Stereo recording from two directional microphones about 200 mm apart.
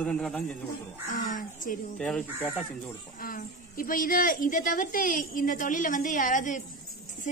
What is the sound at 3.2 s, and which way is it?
Speech, 45° left (ahead or behind).